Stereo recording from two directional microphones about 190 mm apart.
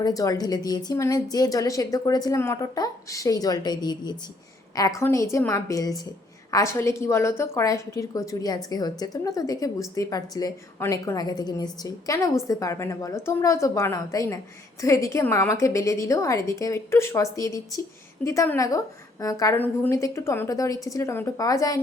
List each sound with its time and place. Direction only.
0.0 s a woman's voice: 20° left (ahead or behind)